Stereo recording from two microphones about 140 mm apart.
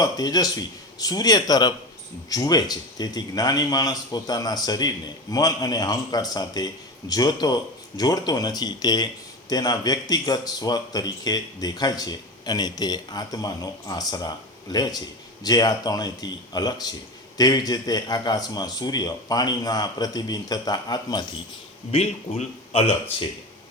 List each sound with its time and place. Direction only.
0.0 s speech: 30° left (ahead or behind)
21.9 s a man's voice: 45° left (ahead or behind)